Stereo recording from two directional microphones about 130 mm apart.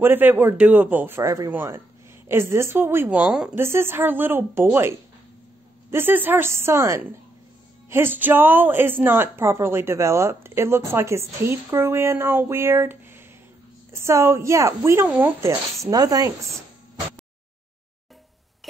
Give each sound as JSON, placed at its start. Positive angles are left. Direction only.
{"t": 0.0, "sound": "a man's voice", "side_deg": -15}
{"t": 3.5, "sound": "a man's voice", "side_deg": -20}
{"t": 15.9, "sound": "a woman's voice", "side_deg": -30}